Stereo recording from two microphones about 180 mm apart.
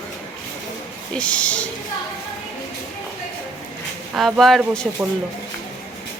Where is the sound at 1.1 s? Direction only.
5° left (ahead or behind).